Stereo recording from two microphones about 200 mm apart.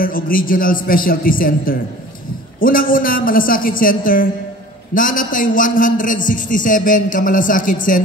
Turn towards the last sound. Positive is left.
turn(degrees=45)  # may be behind; listen again after turning